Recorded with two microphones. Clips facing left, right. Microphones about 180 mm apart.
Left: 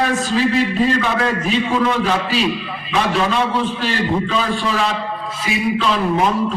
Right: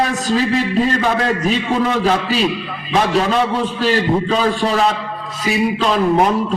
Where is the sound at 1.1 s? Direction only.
40° right (ahead or behind).